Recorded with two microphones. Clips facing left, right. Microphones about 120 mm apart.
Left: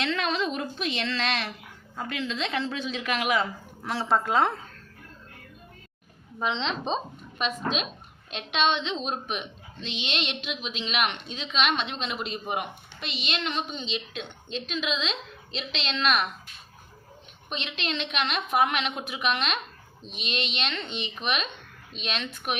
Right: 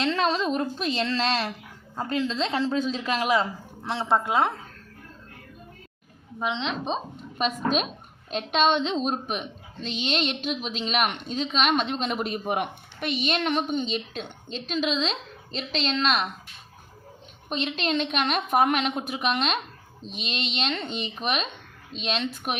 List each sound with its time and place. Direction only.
0.0 s speech: 35° right (ahead or behind)
3.8 s a woman's voice: 20° right (ahead or behind)
6.4 s a woman's voice: 10° right (ahead or behind)
7.3 s speech: 40° right (ahead or behind)
17.5 s speech: 40° right (ahead or behind)